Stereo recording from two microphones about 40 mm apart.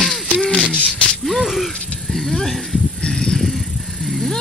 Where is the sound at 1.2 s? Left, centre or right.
Centre.